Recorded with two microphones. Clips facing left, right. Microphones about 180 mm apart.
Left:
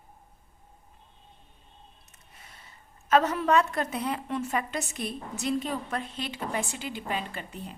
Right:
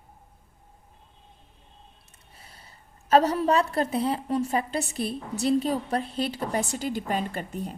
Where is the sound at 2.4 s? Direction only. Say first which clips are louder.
Right 1 dB; 35° right (ahead or behind).